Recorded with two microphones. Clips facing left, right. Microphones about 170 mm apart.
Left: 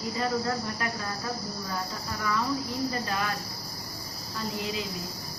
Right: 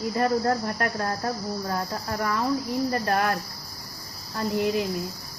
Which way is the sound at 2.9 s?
55° right (ahead or behind).